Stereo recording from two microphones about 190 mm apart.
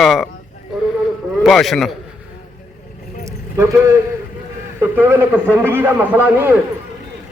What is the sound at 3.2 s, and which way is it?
Vehicle, 15° right (ahead or behind).